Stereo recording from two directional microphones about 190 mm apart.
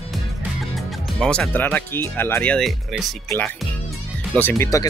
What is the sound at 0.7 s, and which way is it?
Speech, centre (ahead or behind).